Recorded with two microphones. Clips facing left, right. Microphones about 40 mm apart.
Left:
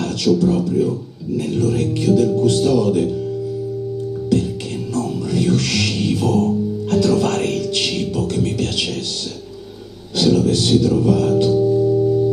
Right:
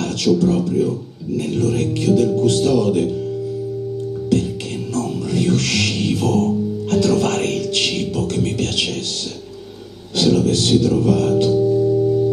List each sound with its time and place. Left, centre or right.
0.3 s speech: centre
0.8 s speech: right
4.9 s music: right
10.1 s speech: right
10.8 s music: right
11.5 s music: centre